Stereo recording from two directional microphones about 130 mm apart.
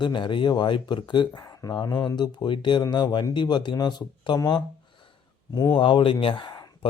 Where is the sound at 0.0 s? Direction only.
35° left (ahead or behind).